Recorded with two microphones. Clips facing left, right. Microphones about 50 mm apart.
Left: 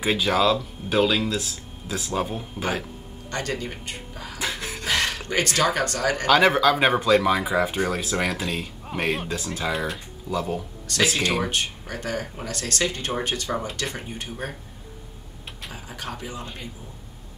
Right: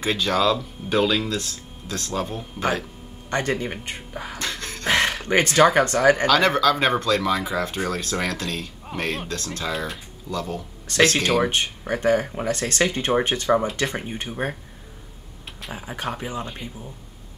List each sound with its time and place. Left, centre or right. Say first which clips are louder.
0.0 s speech: even; centre
3.3 s speech: right 5 dB; right
4.4 s music: left 4 dB; centre
4.8 s a sound: right 4 dB; right
5.8 s speech: right 7 dB; right
6.2 s speech: even; centre
10.9 s speech: right 4 dB; right
15.7 s speech: right 6 dB; right